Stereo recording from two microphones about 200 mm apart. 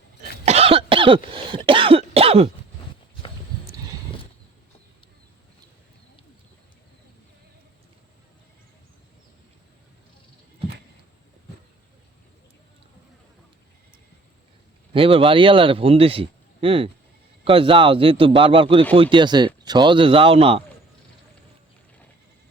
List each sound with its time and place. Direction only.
0.4 s cough: 30° right (ahead or behind)
14.9 s speech: 25° right (ahead or behind)